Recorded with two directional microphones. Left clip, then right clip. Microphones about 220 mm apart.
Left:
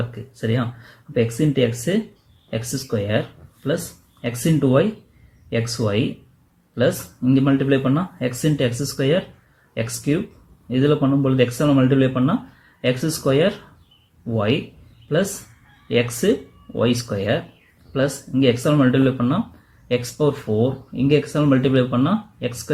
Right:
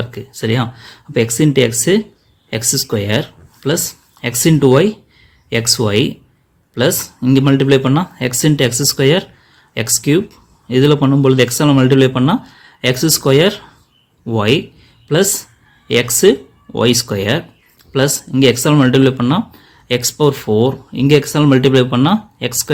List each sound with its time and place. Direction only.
0.1 s speech: 50° right (ahead or behind)
15.9 s speech: 50° right (ahead or behind)